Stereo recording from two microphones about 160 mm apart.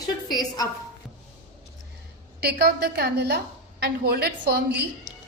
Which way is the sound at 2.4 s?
90° right.